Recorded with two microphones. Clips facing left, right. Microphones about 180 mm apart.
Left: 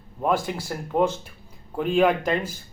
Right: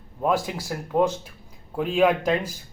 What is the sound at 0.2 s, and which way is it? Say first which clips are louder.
Speech: even; 5° right (ahead or behind).